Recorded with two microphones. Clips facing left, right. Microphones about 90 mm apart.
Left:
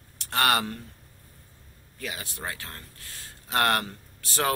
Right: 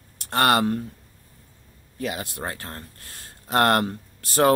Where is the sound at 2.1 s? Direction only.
40° right (ahead or behind).